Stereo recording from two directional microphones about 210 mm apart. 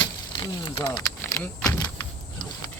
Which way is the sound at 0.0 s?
20° left (ahead or behind).